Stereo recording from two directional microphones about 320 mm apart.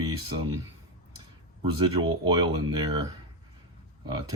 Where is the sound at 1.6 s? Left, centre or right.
Centre.